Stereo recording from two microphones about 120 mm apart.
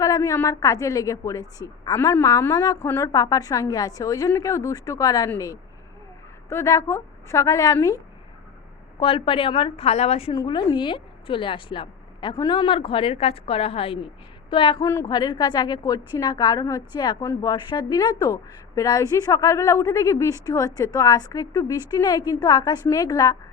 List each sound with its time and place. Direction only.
0.0 s a woman's voice: 25° left (ahead or behind)
6.5 s a woman's voice: 25° left (ahead or behind)
9.0 s a woman's voice: 50° left (ahead or behind)
10.3 s a woman's voice: 35° left (ahead or behind)
14.8 s a woman's voice: 25° left (ahead or behind)
15.0 s a woman's voice: 35° left (ahead or behind)